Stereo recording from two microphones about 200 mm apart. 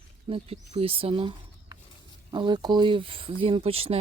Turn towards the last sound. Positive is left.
turn(degrees=-30)  # may be behind; listen again after turning